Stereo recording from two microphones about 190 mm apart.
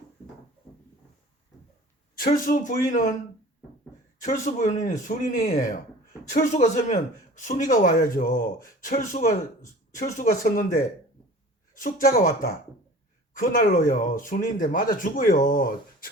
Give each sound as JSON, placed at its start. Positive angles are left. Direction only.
{"t": 2.1, "sound": "speech", "side_deg": 45}
{"t": 4.2, "sound": "speech", "side_deg": 40}